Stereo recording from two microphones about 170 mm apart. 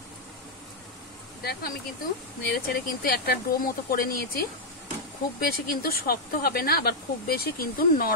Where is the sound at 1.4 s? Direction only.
65° left (ahead or behind).